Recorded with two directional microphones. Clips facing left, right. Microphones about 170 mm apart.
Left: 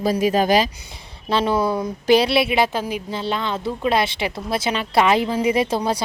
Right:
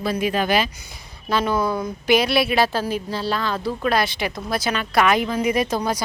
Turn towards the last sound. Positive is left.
turn(degrees=30)  # may be behind; listen again after turning